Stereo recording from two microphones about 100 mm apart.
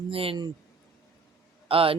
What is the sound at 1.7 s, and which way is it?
Speech, 65° right (ahead or behind).